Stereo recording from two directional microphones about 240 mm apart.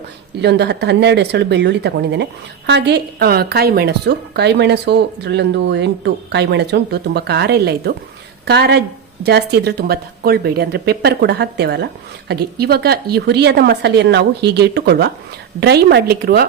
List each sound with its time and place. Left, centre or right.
0.4 s a woman's voice: right